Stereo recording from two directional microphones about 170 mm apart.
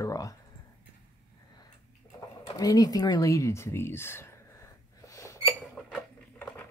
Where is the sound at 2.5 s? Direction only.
20° left (ahead or behind).